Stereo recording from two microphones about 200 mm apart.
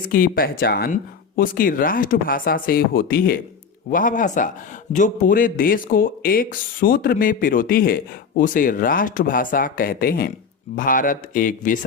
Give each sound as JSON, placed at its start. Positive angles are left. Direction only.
{"t": 0.1, "sound": "a man's voice", "side_deg": 45}